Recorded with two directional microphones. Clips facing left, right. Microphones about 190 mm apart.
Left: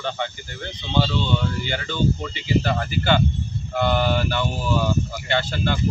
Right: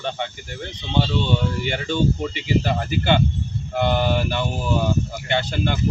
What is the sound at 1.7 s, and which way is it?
Speech, 25° right (ahead or behind).